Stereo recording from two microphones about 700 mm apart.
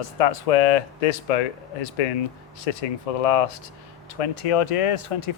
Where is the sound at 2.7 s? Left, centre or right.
Left.